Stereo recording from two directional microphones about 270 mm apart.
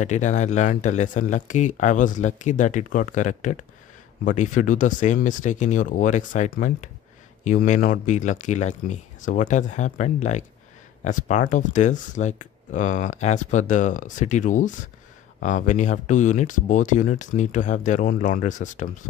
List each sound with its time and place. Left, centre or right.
0.0 s speech: left